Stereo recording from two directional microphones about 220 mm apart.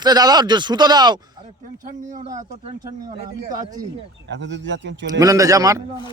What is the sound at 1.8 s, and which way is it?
Speech, 35° right (ahead or behind).